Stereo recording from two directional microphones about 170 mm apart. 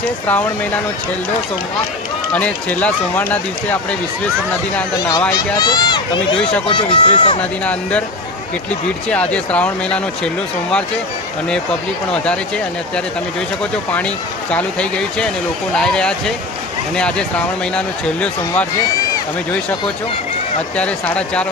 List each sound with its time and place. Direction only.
2.3 s speech: 10° left (ahead or behind)
4.9 s speech: 20° left (ahead or behind)
7.6 s speech: 10° left (ahead or behind)
9.0 s speech: 5° left (ahead or behind)
12.1 s speech: 5° left (ahead or behind)
14.5 s speech: 5° left (ahead or behind)
20.7 s speech: 5° left (ahead or behind)